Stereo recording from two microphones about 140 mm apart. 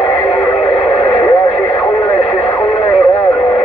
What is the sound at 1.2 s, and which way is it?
Radio, 20° left (ahead or behind).